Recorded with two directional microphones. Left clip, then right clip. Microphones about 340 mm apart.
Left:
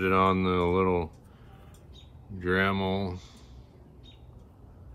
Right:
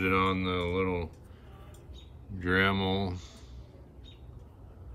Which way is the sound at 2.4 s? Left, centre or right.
Centre.